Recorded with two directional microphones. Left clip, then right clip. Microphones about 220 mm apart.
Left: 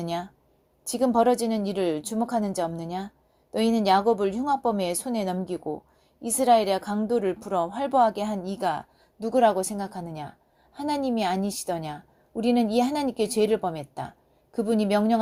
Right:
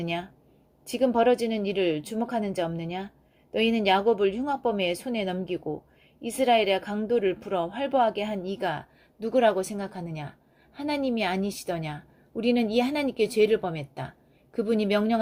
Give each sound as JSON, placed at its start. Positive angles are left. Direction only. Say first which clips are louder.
{"t": 0.0, "sound": "a woman's voice", "louder": "left 1 dB", "side_deg": 30}